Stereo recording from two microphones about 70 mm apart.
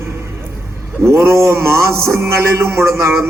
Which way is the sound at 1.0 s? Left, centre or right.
Right.